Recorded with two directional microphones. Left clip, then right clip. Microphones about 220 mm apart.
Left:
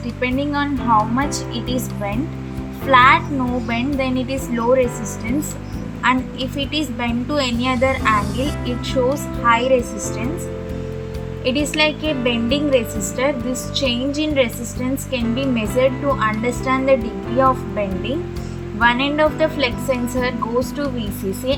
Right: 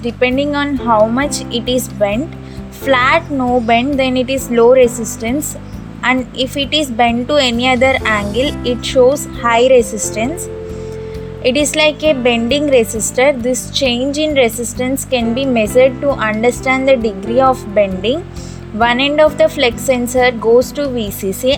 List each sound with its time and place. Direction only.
0.2 s a woman's voice: 40° right (ahead or behind)
6.0 s a woman's voice: 40° right (ahead or behind)
8.1 s speech: centre (ahead or behind)
9.1 s a woman's voice: 40° right (ahead or behind)
11.4 s a woman's voice: 40° right (ahead or behind)